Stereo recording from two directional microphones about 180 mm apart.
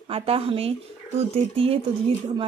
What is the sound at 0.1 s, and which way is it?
Speech, 30° right (ahead or behind).